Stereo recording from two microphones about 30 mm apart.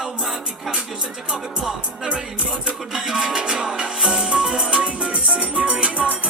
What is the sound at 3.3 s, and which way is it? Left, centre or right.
Music, right.